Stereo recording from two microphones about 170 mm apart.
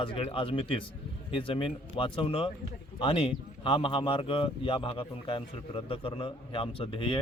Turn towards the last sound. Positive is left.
turn(degrees=30)  # may be behind; listen again after turning